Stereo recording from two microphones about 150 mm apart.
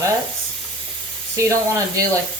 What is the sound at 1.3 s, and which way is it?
Speech, 20° right (ahead or behind).